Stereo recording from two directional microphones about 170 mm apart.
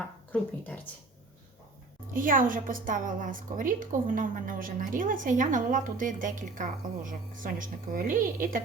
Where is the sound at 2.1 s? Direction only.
55° right (ahead or behind).